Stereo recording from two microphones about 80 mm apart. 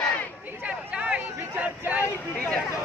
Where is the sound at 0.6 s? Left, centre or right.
Centre.